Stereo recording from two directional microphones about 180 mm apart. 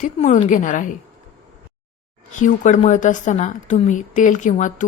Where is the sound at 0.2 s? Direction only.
45° left (ahead or behind).